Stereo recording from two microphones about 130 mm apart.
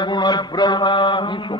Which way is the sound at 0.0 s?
35° left (ahead or behind).